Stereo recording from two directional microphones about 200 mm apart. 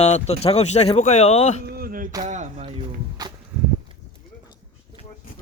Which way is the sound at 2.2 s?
35° right (ahead or behind).